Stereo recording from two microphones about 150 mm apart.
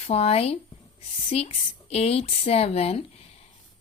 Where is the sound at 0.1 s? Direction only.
45° left (ahead or behind).